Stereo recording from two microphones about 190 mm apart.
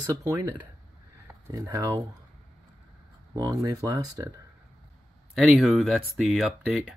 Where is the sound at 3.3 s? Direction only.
20° right (ahead or behind).